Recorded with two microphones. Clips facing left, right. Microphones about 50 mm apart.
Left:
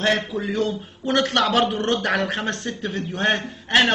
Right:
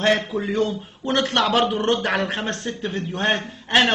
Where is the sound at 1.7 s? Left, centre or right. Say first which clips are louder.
Right 2 dB; centre.